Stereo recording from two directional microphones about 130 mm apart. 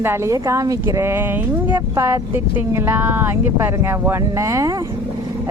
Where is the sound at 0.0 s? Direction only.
20° right (ahead or behind).